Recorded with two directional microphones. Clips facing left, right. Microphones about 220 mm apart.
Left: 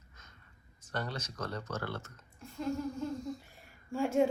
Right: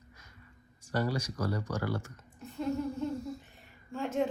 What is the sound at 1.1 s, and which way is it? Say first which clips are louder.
Speech: right 6 dB; 10° right (ahead or behind).